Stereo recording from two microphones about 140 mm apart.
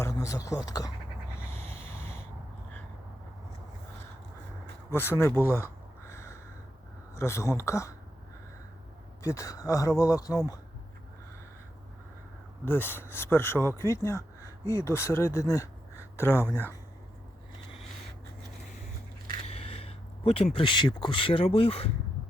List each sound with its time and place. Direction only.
0.0 s speech: 20° left (ahead or behind)
1.5 s sanding: 15° left (ahead or behind)
4.9 s speech: 15° left (ahead or behind)
6.1 s crow: 20° left (ahead or behind)
7.2 s speech: 20° left (ahead or behind)
9.2 s speech: 20° left (ahead or behind)
12.6 s speech: 15° left (ahead or behind)
19.4 s speech: 45° left (ahead or behind)